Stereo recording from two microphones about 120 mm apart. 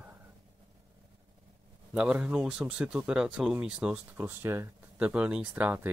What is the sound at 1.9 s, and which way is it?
Speech, 10° right (ahead or behind).